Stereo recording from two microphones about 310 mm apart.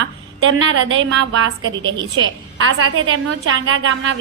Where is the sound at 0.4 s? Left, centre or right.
Right.